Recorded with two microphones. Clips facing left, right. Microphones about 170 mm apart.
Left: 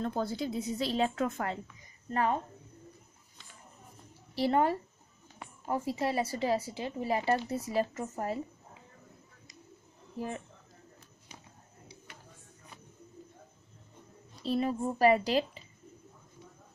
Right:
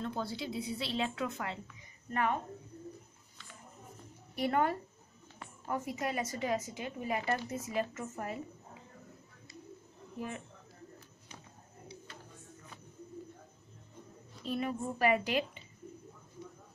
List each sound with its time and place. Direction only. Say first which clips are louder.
0.0 s speech: left 5 dB; 45° left (ahead or behind)
2.0 s speech: left 3 dB; 30° left (ahead or behind)
4.4 s speech: left 4 dB; 30° left (ahead or behind)
14.4 s speech: left 5 dB; 35° left (ahead or behind)